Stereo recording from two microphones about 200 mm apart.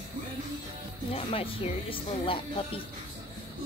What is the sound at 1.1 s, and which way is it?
Speech, 30° left (ahead or behind).